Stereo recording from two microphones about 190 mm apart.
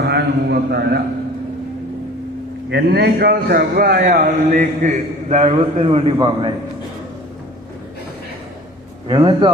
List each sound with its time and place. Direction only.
0.0 s a man's voice: 60° right (ahead or behind)
2.6 s a man's voice: 60° right (ahead or behind); by 6.5 s 25° right (ahead or behind)
9.0 s a man's voice: 25° right (ahead or behind)